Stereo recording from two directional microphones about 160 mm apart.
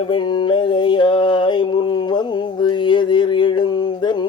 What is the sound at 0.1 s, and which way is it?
Mantra, 30° left (ahead or behind).